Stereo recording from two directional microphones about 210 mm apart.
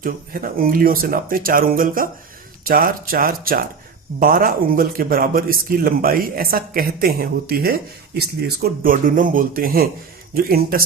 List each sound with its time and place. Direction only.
0.0 s a man's voice: 40° right (ahead or behind)